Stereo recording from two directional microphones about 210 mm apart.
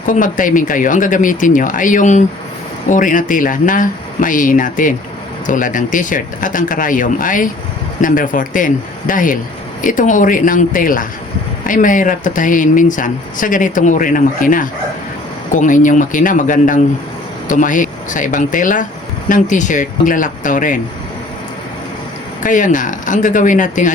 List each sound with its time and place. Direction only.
0.0 s speech: 40° left (ahead or behind)
22.4 s speech: 40° left (ahead or behind)